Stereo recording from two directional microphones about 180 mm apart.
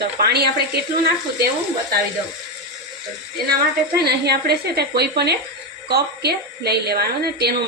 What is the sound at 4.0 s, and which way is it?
A woman's voice, 65° right (ahead or behind).